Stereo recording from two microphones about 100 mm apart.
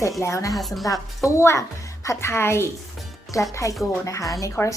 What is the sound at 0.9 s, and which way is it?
A woman's voice, 30° left (ahead or behind).